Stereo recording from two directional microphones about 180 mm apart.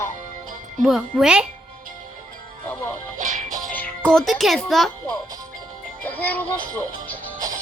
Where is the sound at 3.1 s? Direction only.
45° right (ahead or behind).